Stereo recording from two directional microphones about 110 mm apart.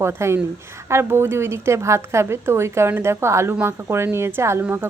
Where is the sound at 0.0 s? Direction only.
25° right (ahead or behind).